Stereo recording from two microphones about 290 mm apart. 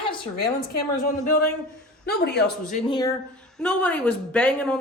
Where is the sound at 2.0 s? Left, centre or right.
Left.